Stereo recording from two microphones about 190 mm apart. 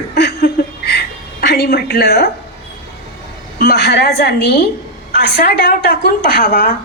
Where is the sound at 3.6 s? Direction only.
55° left (ahead or behind).